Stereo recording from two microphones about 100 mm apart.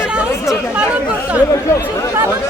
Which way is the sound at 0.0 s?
10° right (ahead or behind).